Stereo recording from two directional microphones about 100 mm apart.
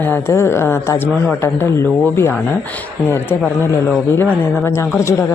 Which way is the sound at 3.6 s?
25° left (ahead or behind).